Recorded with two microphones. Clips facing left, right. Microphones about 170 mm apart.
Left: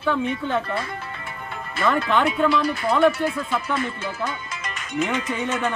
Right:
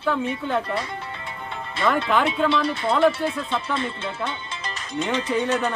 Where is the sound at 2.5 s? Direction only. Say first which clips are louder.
Left 1 dB; 25° right (ahead or behind).